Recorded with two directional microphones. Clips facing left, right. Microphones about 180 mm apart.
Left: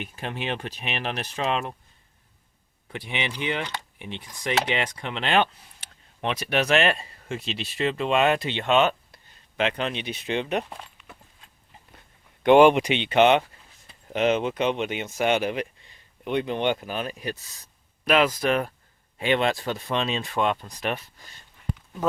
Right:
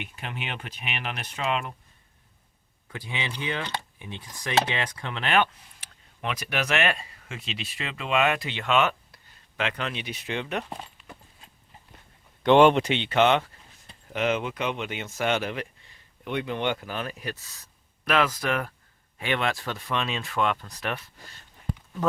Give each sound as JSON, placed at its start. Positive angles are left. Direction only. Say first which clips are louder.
{"t": 0.0, "sound": "speech", "louder": "left 5 dB", "side_deg": 35}
{"t": 2.9, "sound": "speech", "louder": "left 3 dB", "side_deg": 20}
{"t": 10.7, "sound": "a sound", "louder": "right 3 dB", "side_deg": -35}
{"t": 12.5, "sound": "speech", "louder": "left 2 dB", "side_deg": 10}